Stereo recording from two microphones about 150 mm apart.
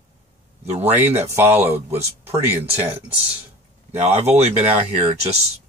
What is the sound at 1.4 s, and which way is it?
Speech, 15° right (ahead or behind).